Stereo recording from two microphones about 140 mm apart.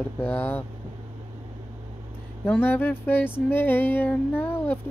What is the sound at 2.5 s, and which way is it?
Speech, 15° left (ahead or behind).